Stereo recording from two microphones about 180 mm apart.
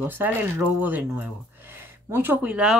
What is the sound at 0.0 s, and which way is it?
Speech, 10° right (ahead or behind).